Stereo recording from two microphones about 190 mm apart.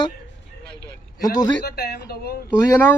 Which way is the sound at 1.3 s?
55° left (ahead or behind).